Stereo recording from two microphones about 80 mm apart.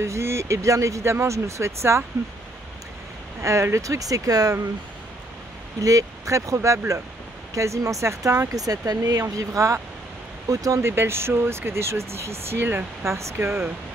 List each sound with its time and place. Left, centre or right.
0.0 s speech: right
3.4 s speech: right
5.8 s speech: right
10.8 s speech: right